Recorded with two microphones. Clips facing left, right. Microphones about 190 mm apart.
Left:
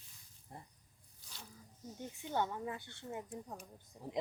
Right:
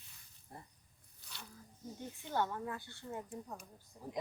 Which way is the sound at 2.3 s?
15° left (ahead or behind).